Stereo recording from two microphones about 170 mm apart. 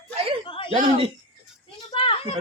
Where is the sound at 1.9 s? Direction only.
30° left (ahead or behind).